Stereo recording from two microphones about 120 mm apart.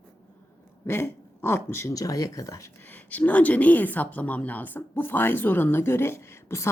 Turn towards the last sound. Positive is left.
turn(degrees=25)  # may be behind; listen again after turning